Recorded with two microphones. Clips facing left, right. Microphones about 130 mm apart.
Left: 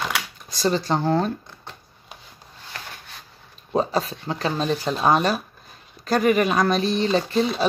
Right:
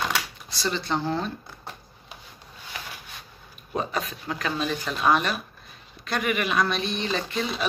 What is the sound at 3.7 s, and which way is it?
Speech, 35° left (ahead or behind).